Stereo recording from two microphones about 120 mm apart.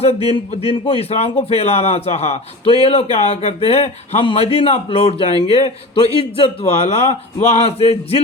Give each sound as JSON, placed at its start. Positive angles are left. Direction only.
{"t": 0.3, "sound": "a man's voice", "side_deg": 55}